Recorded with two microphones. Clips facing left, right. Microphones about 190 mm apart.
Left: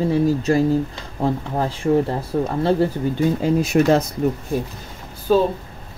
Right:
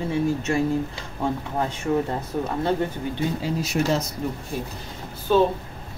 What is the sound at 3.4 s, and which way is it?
Speech, 55° left (ahead or behind).